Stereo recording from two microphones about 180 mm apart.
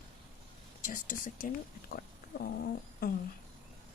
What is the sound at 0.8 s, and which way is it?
Speech, 50° left (ahead or behind).